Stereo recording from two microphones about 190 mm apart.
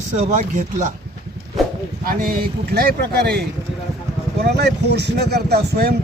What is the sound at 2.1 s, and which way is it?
Speech, 50° right (ahead or behind).